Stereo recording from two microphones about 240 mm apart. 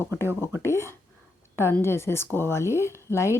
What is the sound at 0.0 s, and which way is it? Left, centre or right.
Speech, centre.